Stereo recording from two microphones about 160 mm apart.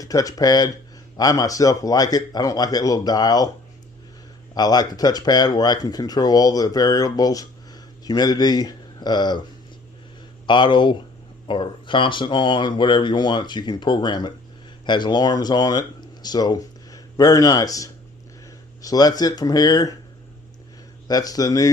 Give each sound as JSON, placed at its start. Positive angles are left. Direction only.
{"t": 0.0, "sound": "speech", "side_deg": 20}
{"t": 4.5, "sound": "speech", "side_deg": 25}
{"t": 10.4, "sound": "speech", "side_deg": 30}
{"t": 21.1, "sound": "speech", "side_deg": 25}